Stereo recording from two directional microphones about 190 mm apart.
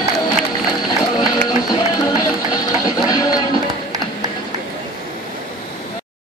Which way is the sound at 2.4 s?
20° left (ahead or behind).